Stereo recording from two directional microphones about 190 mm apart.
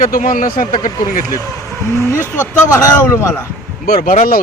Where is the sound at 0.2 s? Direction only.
45° left (ahead or behind).